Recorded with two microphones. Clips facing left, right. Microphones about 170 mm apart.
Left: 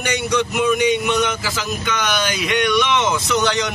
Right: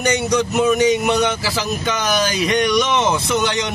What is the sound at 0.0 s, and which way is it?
Speech, 40° right (ahead or behind).